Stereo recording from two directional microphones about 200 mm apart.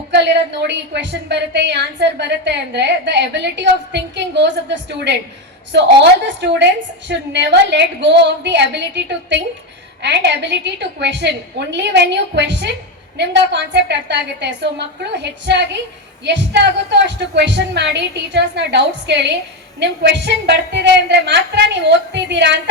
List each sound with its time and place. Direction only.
0.7 s a woman's voice: 60° right (ahead or behind)